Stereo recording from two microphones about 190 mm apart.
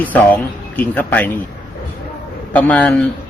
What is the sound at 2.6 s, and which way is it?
Speech, 5° left (ahead or behind).